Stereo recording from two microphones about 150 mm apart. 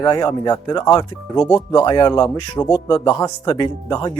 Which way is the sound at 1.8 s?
25° left (ahead or behind).